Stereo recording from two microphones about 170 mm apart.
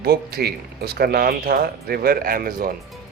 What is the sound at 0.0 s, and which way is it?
Speech, 65° right (ahead or behind).